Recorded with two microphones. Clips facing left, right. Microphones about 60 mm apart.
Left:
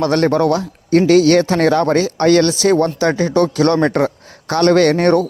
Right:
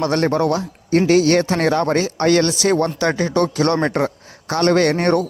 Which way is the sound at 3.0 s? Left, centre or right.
Left.